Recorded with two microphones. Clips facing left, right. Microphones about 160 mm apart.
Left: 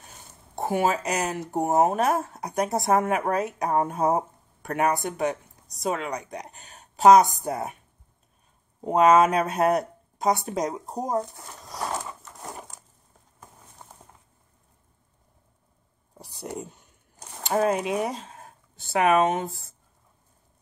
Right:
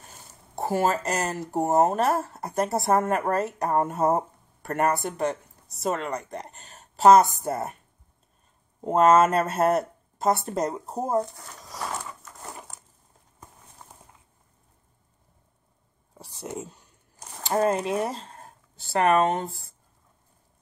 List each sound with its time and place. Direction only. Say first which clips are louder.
0.6 s speech: even; centre (ahead or behind)
8.8 s speech: even; centre (ahead or behind)
16.3 s speech: even; centre (ahead or behind)